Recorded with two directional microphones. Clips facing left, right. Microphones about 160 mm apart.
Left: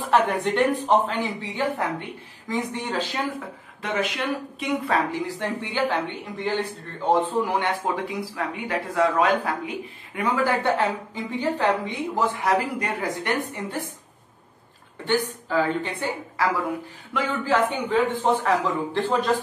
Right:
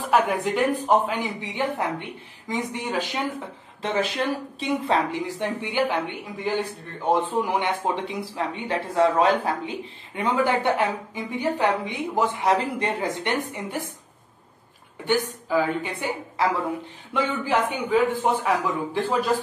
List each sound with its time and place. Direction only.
0.1 s a woman's voice: 5° right (ahead or behind)
3.8 s a woman's voice: 30° right (ahead or behind)
15.0 s a woman's voice: 10° right (ahead or behind)